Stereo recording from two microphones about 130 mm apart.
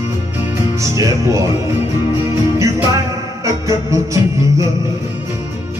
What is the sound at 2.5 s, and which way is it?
Music, 25° right (ahead or behind).